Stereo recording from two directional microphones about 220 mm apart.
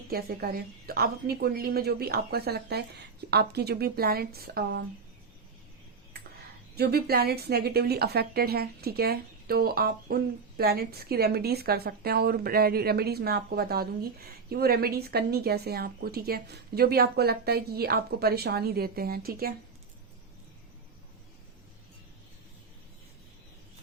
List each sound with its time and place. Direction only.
0.1 s speech: 45° right (ahead or behind)
6.7 s speech: 45° right (ahead or behind)